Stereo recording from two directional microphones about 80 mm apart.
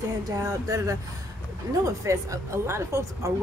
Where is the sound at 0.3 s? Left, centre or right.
Right.